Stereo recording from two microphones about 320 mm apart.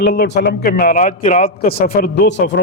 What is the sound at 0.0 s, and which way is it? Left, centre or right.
A man's voice, left.